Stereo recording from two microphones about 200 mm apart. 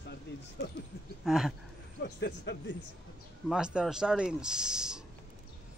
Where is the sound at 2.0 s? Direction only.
60° left (ahead or behind).